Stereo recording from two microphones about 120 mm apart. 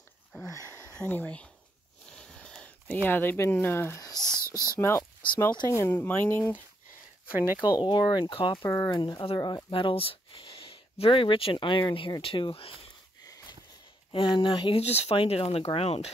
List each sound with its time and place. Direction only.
0.9 s speech: 15° left (ahead or behind)
2.0 s a sound: 5° left (ahead or behind)
4.4 s whispering: 25° right (ahead or behind)
4.6 s speech: 20° left (ahead or behind)
5.9 s speech: 15° left (ahead or behind)
7.6 s speech: 40° left (ahead or behind)
8.6 s speech: 25° left (ahead or behind)
9.7 s speech: 45° left (ahead or behind)
13.2 s wheeze: 35° left (ahead or behind)
14.1 s speech: 45° left (ahead or behind)